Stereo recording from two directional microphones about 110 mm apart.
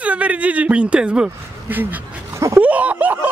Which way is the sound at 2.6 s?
15° right (ahead or behind).